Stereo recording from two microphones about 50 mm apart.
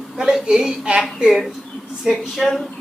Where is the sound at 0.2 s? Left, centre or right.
Centre.